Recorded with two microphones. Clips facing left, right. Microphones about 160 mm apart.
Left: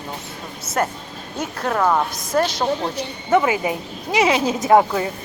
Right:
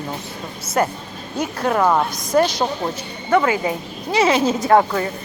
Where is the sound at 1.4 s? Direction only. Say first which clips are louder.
Right 3 dB; 5° right (ahead or behind).